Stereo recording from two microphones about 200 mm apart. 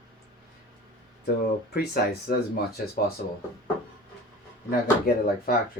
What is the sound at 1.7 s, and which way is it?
Speech, 50° left (ahead or behind).